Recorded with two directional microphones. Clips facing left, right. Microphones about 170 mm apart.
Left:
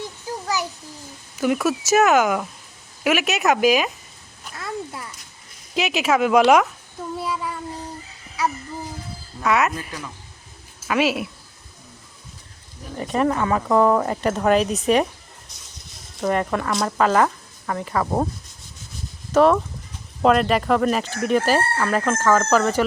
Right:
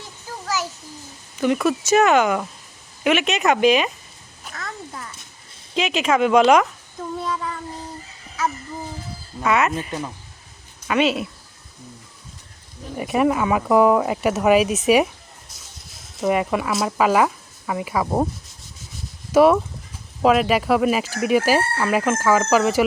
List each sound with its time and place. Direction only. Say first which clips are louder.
0.4 s a sound: even; 15° left (ahead or behind)
1.4 s speech: right 1 dB; 5° left (ahead or behind)
4.4 s a sound: left 4 dB; 10° left (ahead or behind)
5.7 s speech: even; 5° left (ahead or behind)
7.2 s child singing: even; 10° left (ahead or behind)
8.4 s a sound: even; 10° left (ahead or behind)
9.4 s speech: right 1 dB; centre (ahead or behind)
10.8 s speech: right 1 dB; 5° left (ahead or behind)
13.0 s speech: right 2 dB; 10° right (ahead or behind)
16.1 s speech: right 2 dB; 5° right (ahead or behind)
19.3 s speech: right 2 dB; 10° right (ahead or behind)